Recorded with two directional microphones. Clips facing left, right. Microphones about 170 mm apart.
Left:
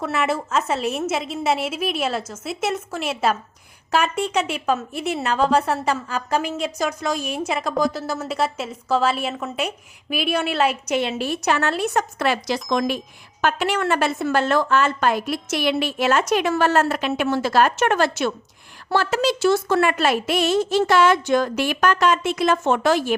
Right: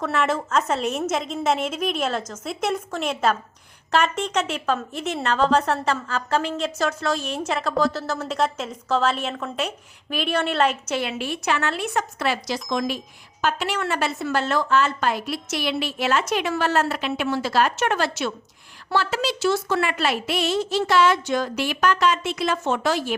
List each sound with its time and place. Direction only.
0.0 s a woman's voice: 5° left (ahead or behind)
11.2 s a woman's voice: 40° left (ahead or behind)
12.2 s a woman's voice: 55° left (ahead or behind)